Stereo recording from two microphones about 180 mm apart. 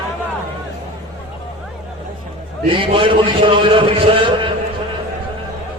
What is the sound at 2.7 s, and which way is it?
A man's voice, 30° right (ahead or behind).